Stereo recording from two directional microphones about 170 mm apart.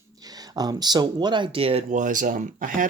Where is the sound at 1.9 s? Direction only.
50° right (ahead or behind).